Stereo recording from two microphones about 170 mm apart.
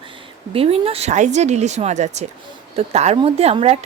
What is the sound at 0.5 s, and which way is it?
Speech, 35° right (ahead or behind).